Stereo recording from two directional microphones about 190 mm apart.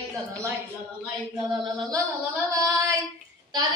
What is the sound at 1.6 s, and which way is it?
Speech, 25° right (ahead or behind).